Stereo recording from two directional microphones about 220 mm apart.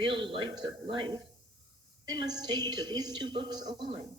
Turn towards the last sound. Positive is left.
turn(degrees=-20)  # may be behind; listen again after turning